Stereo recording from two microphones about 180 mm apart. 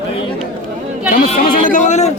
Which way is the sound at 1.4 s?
45° left (ahead or behind).